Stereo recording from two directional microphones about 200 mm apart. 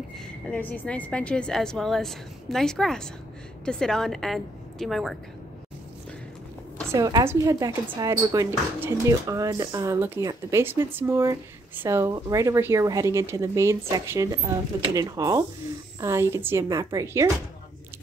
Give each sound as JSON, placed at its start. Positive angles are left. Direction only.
{"t": 0.5, "sound": "a woman's voice", "side_deg": 10}
{"t": 6.9, "sound": "speech", "side_deg": -15}